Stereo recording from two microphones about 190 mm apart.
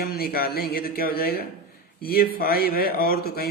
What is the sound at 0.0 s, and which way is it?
Speech, 55° left (ahead or behind).